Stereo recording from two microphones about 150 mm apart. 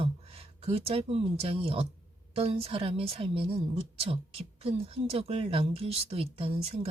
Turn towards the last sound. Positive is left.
turn(degrees=-40)  # may be behind; listen again after turning